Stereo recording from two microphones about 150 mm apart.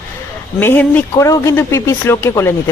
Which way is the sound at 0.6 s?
10° left (ahead or behind).